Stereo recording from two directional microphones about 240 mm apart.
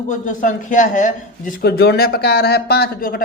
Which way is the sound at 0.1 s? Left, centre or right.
Left.